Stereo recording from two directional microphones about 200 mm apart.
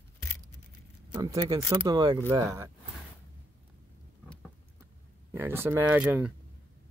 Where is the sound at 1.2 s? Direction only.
20° right (ahead or behind).